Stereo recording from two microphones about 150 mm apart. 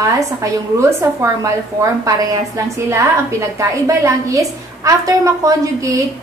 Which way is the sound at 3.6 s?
20° right (ahead or behind).